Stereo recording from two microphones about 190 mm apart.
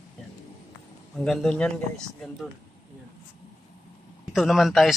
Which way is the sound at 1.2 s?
5° left (ahead or behind).